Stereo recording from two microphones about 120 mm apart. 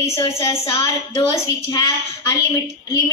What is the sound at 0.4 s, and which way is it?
Child singing, 45° left (ahead or behind).